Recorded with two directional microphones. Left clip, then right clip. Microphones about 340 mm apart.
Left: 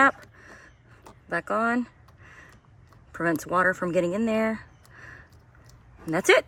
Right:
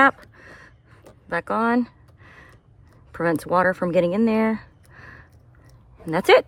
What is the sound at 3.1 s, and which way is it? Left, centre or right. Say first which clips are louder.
Speech: right 4 dB; centre.